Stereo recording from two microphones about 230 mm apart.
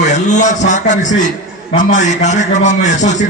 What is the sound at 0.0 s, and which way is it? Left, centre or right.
A man's voice, left.